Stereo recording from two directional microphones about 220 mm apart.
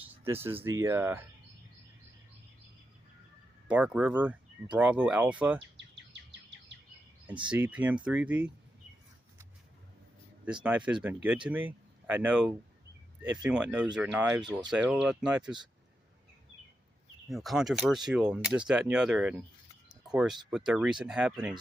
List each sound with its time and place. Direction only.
0.0 s speech: 10° right (ahead or behind)
3.7 s speech: 5° right (ahead or behind)
5.5 s bird vocalization: 55° right (ahead or behind)
7.4 s speech: 5° right (ahead or behind)
10.4 s speech: 5° right (ahead or behind)
17.2 s speech: centre (ahead or behind)